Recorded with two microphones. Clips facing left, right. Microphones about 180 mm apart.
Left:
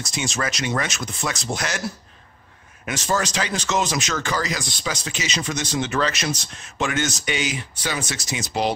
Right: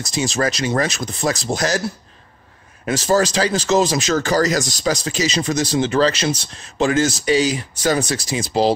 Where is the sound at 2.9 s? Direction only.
35° right (ahead or behind).